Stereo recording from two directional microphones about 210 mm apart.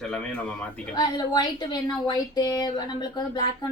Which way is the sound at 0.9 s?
20° left (ahead or behind).